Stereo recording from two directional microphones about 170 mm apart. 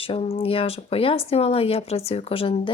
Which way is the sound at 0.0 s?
35° left (ahead or behind).